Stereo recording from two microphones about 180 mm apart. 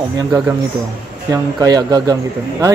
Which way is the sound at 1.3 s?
20° right (ahead or behind).